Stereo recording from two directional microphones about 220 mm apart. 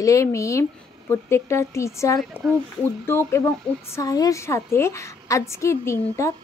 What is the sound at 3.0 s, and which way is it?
A woman's voice, 10° left (ahead or behind).